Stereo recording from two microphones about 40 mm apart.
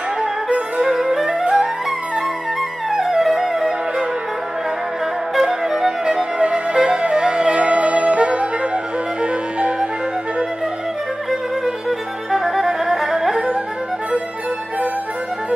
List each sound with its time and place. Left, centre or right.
0.8 s music: centre
1.4 s music: right
2.9 s music: centre
5.3 s music: centre; by 9.8 s right
12.3 s music: centre